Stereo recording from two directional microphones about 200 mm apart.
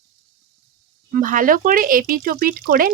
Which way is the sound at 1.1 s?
40° right (ahead or behind).